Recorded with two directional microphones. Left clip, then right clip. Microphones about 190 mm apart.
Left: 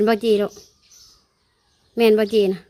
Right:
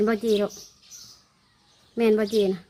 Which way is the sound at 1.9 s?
40° left (ahead or behind).